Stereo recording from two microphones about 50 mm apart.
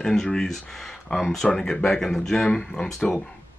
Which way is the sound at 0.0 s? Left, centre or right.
Centre.